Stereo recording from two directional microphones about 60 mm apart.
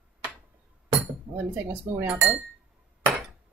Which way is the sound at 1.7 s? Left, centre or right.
Right.